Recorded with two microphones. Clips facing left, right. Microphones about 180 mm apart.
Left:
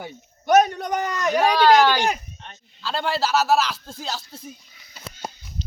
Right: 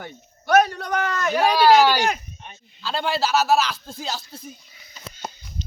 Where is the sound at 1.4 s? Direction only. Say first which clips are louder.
Right 1 dB; 10° right (ahead or behind).